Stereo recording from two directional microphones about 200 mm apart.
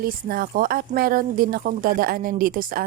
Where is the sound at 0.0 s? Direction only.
45° right (ahead or behind).